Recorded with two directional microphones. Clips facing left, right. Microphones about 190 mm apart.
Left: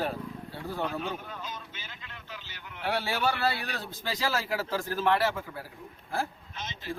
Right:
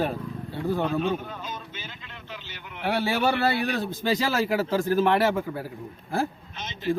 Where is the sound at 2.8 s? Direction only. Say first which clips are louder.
Right 5 dB; 20° right (ahead or behind).